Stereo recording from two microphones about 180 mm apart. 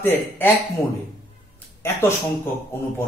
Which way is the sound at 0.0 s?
10° left (ahead or behind).